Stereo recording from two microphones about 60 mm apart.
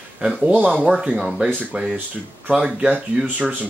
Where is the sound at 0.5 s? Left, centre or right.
Right.